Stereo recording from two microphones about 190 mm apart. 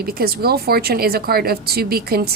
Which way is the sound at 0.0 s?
50° right (ahead or behind).